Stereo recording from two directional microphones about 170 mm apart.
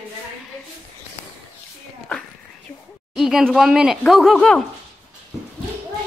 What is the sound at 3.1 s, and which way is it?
Speech, centre (ahead or behind).